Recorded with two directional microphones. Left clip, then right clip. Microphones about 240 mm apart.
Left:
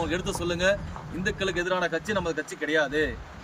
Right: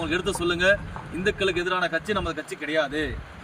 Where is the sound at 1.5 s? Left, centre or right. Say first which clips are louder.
Right 2 dB; centre.